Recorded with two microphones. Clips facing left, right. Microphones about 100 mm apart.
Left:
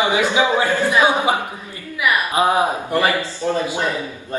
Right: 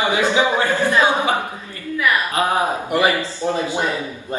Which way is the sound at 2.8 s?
15° right (ahead or behind).